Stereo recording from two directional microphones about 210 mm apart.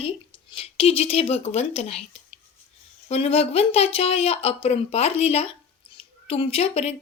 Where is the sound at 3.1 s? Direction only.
30° left (ahead or behind).